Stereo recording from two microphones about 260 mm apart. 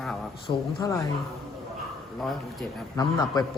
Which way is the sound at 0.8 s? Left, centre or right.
Centre.